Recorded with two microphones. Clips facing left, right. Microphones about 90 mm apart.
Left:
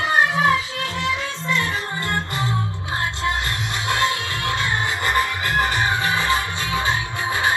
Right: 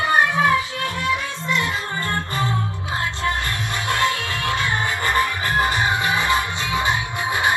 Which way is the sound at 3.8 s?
20° left (ahead or behind).